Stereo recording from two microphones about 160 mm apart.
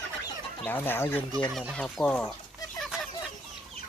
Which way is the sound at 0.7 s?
10° left (ahead or behind).